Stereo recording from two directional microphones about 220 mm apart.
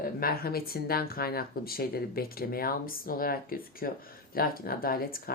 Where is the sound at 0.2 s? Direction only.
45° left (ahead or behind).